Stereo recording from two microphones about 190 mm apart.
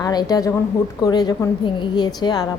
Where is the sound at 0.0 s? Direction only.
20° left (ahead or behind).